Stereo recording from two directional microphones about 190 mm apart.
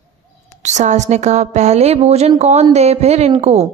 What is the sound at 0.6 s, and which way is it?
A woman's voice, 40° right (ahead or behind).